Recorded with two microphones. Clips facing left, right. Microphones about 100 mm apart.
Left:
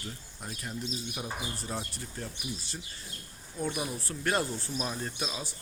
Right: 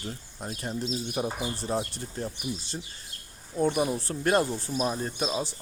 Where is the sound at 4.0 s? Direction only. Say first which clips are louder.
Right 6 dB; 25° right (ahead or behind).